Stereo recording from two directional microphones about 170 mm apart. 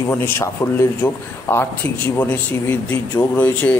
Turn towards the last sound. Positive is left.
turn(degrees=10)  # may be behind; listen again after turning